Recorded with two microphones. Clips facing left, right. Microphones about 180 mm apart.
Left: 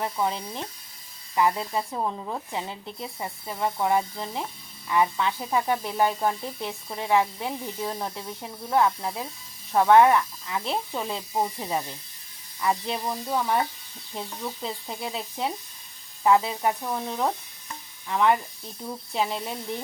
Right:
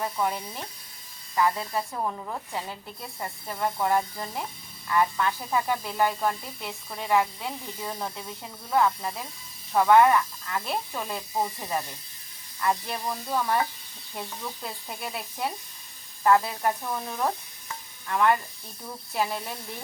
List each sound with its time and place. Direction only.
0.0 s speech: 20° left (ahead or behind)
7.1 s speech: 5° left (ahead or behind)
10.6 s speech: 20° left (ahead or behind)